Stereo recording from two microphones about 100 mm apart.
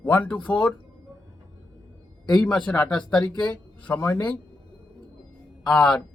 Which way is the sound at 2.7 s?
10° left (ahead or behind).